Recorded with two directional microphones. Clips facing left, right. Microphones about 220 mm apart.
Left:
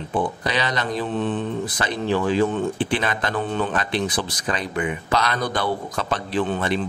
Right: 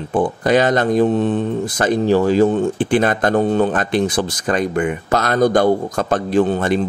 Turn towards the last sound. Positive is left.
turn(degrees=-45)  # may be behind; listen again after turning